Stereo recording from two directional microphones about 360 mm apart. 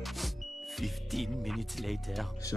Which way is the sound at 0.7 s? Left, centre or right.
Centre.